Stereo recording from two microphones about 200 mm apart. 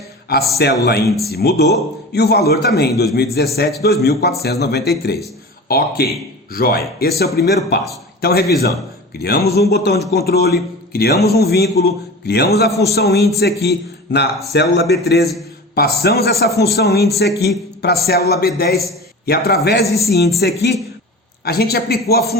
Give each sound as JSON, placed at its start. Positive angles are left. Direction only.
{"t": 0.3, "sound": "a man's voice", "side_deg": 55}